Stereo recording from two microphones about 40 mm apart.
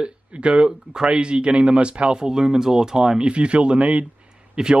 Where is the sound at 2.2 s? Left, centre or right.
Centre.